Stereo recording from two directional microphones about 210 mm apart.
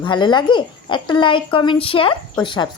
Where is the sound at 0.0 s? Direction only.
20° left (ahead or behind).